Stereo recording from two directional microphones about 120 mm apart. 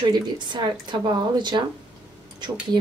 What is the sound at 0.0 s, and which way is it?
Speech, 40° right (ahead or behind).